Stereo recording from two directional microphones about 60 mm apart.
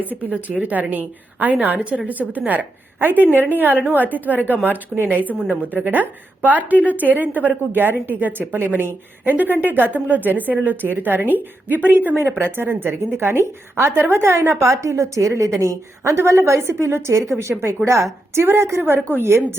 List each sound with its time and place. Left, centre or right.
0.0 s a woman's voice: right
14.6 s a woman's voice: right
16.1 s a woman's voice: right